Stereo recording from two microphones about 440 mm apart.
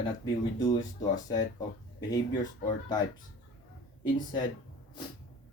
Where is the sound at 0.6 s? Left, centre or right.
Centre.